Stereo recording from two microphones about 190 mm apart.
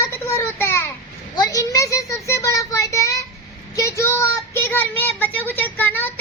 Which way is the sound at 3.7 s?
15° left (ahead or behind).